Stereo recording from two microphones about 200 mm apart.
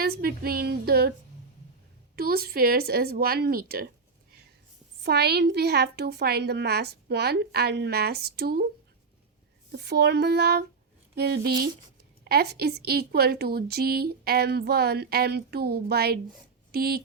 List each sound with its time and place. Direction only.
0.0 s female singing: 50° right (ahead or behind)
2.1 s a woman's voice: 50° right (ahead or behind)
5.0 s a woman's voice: 55° right (ahead or behind)
9.7 s a woman's voice: 55° right (ahead or behind)